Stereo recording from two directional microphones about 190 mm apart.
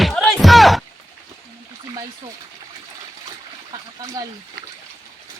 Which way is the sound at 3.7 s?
20° right (ahead or behind).